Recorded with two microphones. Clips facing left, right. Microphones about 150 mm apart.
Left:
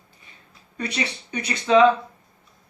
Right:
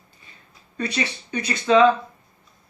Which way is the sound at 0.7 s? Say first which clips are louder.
Right 2 dB; 20° left (ahead or behind).